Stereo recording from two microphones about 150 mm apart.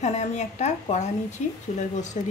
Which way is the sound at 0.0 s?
50° left (ahead or behind).